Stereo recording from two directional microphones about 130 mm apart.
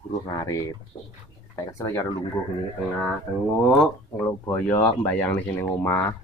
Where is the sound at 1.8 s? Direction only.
20° left (ahead or behind).